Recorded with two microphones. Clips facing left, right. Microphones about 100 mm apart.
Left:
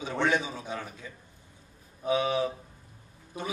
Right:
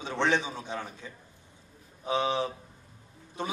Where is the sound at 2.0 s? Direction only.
25° right (ahead or behind).